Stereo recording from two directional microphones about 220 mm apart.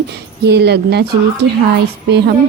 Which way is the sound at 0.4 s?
50° right (ahead or behind).